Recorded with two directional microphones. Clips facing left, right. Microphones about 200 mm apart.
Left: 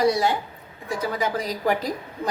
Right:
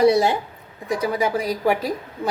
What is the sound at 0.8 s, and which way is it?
A woman's voice, 10° right (ahead or behind).